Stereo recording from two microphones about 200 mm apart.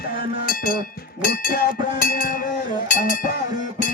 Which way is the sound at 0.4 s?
45° left (ahead or behind).